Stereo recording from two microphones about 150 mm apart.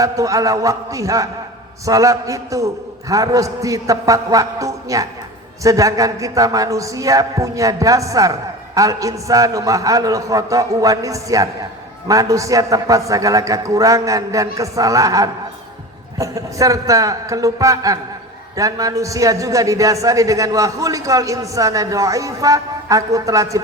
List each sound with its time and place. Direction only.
0.0 s a man's voice: 20° right (ahead or behind)